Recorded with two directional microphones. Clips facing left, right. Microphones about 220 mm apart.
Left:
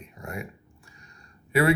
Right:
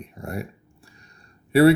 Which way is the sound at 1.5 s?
35° right (ahead or behind).